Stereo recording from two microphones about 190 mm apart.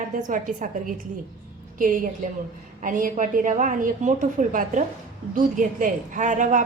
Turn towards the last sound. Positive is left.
turn(degrees=-40)  # may be behind; listen again after turning